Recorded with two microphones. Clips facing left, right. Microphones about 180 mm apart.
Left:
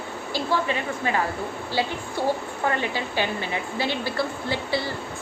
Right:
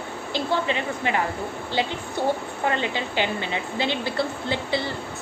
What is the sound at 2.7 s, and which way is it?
A woman's voice, 20° right (ahead or behind).